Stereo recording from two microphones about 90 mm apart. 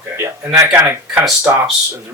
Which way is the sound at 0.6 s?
25° right (ahead or behind).